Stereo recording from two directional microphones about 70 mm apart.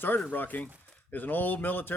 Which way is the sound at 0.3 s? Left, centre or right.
Left.